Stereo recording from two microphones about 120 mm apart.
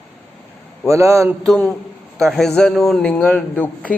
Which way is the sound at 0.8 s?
25° right (ahead or behind).